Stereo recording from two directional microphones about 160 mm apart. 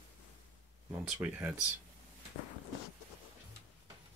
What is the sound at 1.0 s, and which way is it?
Speech, 10° right (ahead or behind).